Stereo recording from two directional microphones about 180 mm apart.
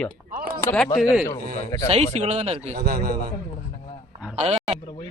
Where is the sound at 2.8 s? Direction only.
60° right (ahead or behind).